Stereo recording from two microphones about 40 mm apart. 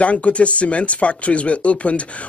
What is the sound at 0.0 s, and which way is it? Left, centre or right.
A man's voice, left.